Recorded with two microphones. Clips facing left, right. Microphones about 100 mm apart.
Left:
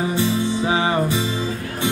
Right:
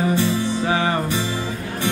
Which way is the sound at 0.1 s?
20° left (ahead or behind).